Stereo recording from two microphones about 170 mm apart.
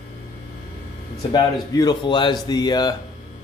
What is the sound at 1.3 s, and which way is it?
Speech, 25° left (ahead or behind).